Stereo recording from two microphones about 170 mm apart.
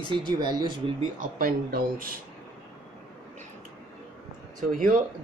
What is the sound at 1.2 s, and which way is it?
Speech, 55° right (ahead or behind).